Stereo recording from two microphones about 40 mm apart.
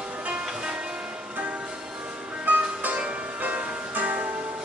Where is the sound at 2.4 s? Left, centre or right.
Right.